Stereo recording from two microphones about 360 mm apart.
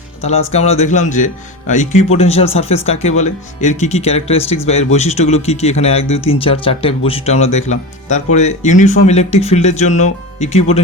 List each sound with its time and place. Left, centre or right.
0.2 s speech: centre